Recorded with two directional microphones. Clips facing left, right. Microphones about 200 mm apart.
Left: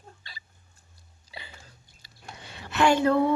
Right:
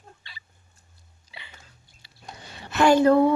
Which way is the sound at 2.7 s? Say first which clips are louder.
Right 4 dB; 40° right (ahead or behind).